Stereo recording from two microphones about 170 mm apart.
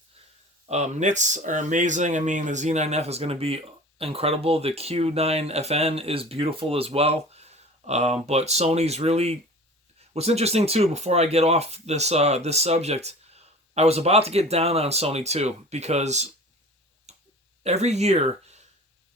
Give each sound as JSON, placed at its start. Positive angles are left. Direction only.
{"t": 0.7, "sound": "speech", "side_deg": -40}
{"t": 17.1, "sound": "tick-tock", "side_deg": -40}
{"t": 17.6, "sound": "speech", "side_deg": -40}